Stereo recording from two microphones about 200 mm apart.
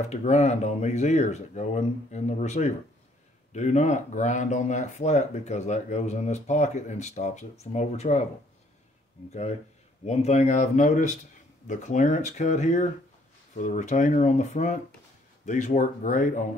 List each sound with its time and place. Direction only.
0.1 s speech: 35° left (ahead or behind)
10.0 s speech: 35° left (ahead or behind)